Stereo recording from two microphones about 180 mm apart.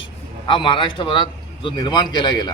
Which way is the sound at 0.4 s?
25° left (ahead or behind).